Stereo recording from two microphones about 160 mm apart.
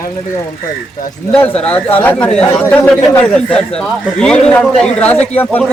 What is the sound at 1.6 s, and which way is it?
Speech, 10° left (ahead or behind).